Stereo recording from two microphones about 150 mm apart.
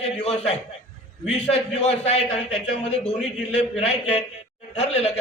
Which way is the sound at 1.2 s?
45° left (ahead or behind).